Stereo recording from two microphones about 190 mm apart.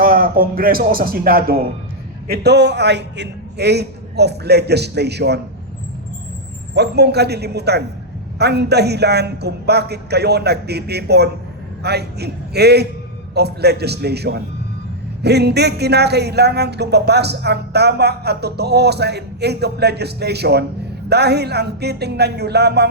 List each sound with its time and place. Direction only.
0.0 s a man's voice: 50° right (ahead or behind)
6.7 s speech: 60° right (ahead or behind)